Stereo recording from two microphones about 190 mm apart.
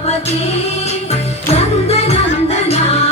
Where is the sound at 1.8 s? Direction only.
35° left (ahead or behind).